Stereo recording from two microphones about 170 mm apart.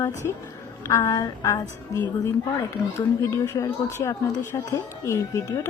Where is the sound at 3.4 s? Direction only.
15° left (ahead or behind).